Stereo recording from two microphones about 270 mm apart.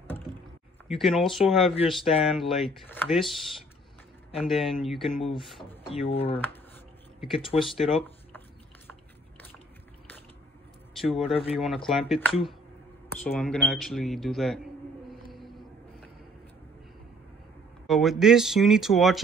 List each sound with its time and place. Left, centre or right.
0.8 s speech: centre
5.9 s speech: left
7.5 s speech: centre
11.0 s speech: centre
15.3 s a sound: centre
17.8 s speech: centre